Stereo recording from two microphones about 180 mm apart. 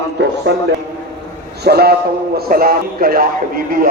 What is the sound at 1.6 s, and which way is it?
A man's voice, 60° right (ahead or behind).